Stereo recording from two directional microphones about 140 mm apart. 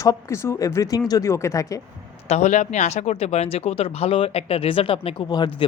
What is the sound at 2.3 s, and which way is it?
Speech, 55° left (ahead or behind).